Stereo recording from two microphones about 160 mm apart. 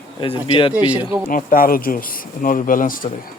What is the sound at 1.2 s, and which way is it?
Speech, 60° left (ahead or behind).